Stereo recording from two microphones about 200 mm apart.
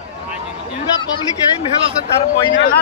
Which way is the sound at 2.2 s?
25° left (ahead or behind).